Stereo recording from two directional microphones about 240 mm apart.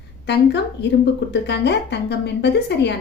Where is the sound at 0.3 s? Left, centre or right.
Left.